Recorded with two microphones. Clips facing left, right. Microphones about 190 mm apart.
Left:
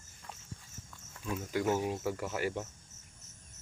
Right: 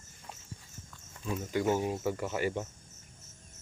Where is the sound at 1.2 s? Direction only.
Centre (ahead or behind).